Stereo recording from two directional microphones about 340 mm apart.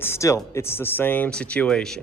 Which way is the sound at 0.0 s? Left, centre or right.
Centre.